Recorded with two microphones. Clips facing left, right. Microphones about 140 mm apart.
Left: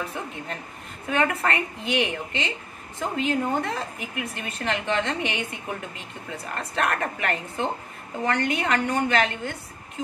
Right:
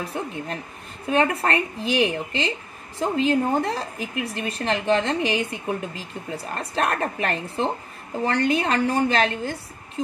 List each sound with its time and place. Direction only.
0.0 s a woman's voice: 35° right (ahead or behind)